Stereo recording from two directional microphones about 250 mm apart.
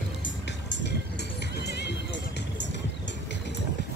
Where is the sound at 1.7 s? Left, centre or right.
Left.